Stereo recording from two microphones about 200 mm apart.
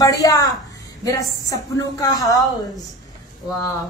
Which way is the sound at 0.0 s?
15° left (ahead or behind).